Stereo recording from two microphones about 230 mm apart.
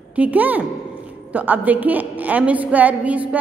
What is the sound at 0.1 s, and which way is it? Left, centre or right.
A woman's voice, centre.